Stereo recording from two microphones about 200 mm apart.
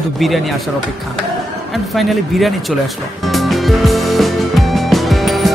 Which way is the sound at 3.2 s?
Centre (ahead or behind).